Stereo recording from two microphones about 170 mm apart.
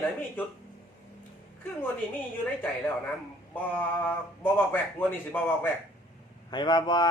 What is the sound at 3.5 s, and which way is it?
Speech, 10° left (ahead or behind).